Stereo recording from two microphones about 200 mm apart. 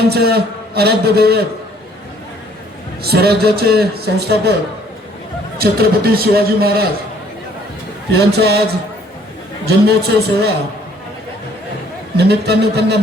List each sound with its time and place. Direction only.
0.1 s a man's voice: 55° right (ahead or behind)
3.0 s a man's voice: 55° right (ahead or behind)
5.5 s a man's voice: 50° right (ahead or behind)
8.1 s a man's voice: 55° right (ahead or behind)
9.6 s a man's voice: 55° right (ahead or behind)
12.1 s speech: 55° right (ahead or behind)